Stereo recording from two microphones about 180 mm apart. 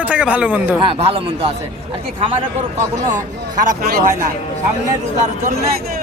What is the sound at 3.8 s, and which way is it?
Speech, 60° right (ahead or behind).